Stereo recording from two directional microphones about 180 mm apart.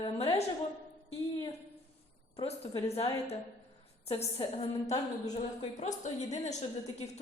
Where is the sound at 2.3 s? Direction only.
35° left (ahead or behind).